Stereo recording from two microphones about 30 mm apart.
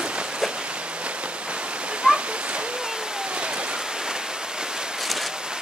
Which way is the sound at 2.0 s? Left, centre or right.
Right.